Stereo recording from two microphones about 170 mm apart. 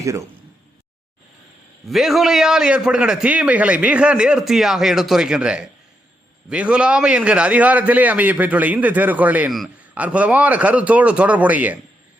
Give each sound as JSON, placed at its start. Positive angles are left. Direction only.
{"t": 0.0, "sound": "speech", "side_deg": -20}
{"t": 1.9, "sound": "a man's voice", "side_deg": 0}